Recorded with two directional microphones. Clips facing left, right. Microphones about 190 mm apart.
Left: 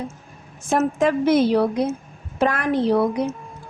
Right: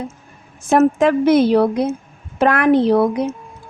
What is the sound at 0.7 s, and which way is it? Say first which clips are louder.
A woman's voice: right 6 dB; 65° right (ahead or behind).